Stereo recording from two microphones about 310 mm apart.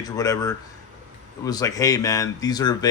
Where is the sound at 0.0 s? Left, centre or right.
Centre.